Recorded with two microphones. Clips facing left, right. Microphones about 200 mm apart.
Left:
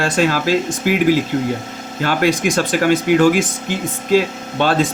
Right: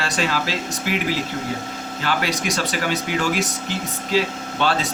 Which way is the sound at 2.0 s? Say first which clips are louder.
Left 8 dB; 50° left (ahead or behind).